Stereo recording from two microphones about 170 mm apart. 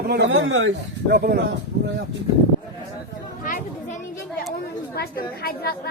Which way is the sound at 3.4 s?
55° left (ahead or behind).